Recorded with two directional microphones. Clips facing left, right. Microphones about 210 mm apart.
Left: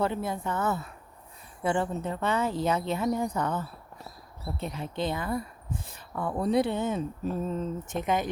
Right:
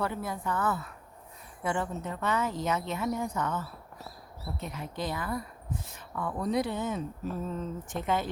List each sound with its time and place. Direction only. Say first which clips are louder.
0.0 s speech: left 4 dB; 25° left (ahead or behind)
4.6 s speech: left 4 dB; 30° left (ahead or behind)